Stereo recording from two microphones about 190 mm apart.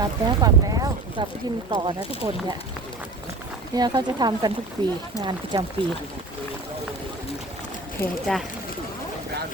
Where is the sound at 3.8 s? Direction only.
20° right (ahead or behind).